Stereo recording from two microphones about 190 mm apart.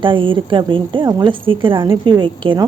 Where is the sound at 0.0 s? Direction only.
25° right (ahead or behind).